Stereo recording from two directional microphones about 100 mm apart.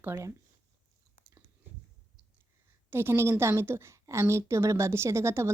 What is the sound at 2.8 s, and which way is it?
A woman's voice, 25° right (ahead or behind).